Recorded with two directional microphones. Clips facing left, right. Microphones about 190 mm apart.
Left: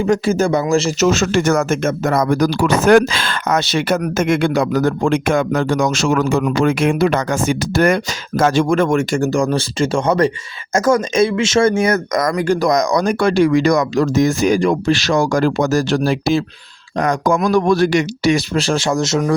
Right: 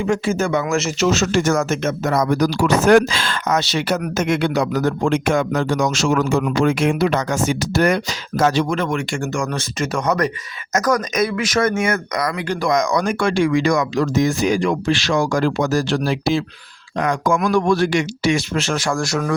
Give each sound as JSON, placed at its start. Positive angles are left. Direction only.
{"t": 0.0, "sound": "speech", "side_deg": 40}
{"t": 1.0, "sound": "speech", "side_deg": 55}